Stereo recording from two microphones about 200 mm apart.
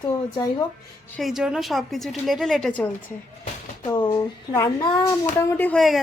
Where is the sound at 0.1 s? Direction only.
20° left (ahead or behind).